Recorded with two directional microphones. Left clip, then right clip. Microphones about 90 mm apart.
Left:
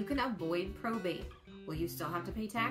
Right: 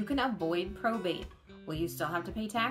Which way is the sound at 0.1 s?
25° right (ahead or behind).